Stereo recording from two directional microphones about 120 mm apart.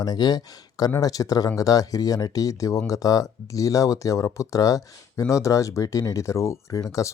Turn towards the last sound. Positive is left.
turn(degrees=25)  # may be behind; listen again after turning